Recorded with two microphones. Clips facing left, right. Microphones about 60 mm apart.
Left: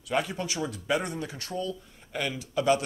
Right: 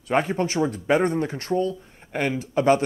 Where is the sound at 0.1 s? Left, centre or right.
Right.